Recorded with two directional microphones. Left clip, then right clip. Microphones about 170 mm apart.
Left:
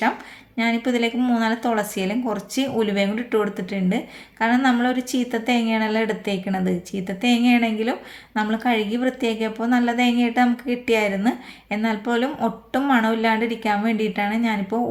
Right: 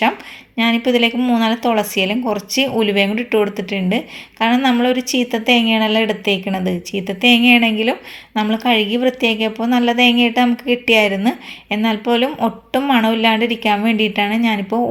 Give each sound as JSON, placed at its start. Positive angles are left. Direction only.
{"t": 0.5, "sound": "a woman's voice", "side_deg": -15}